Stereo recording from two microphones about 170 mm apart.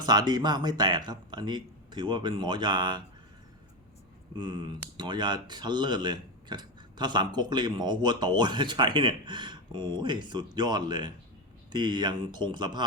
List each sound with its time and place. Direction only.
0.0 s speech: 25° right (ahead or behind)
4.4 s speech: 25° right (ahead or behind)